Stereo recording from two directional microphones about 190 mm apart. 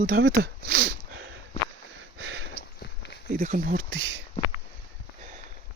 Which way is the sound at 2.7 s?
60° left (ahead or behind).